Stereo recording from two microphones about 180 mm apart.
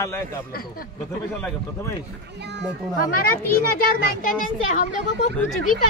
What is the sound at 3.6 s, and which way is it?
A child's voice, 55° left (ahead or behind).